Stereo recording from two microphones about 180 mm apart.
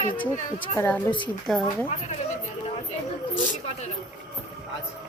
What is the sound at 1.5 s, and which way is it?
Music, centre (ahead or behind).